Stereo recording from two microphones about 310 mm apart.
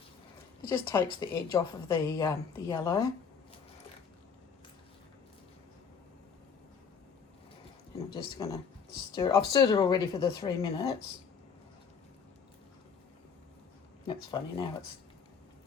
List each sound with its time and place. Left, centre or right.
0.7 s a woman's voice: centre
7.9 s a woman's voice: centre
14.1 s a woman's voice: centre